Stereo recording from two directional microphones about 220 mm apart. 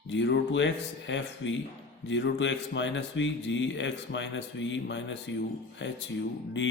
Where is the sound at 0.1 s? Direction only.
55° left (ahead or behind).